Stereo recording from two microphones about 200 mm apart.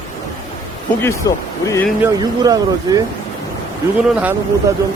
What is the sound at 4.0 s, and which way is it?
Speech, 5° right (ahead or behind).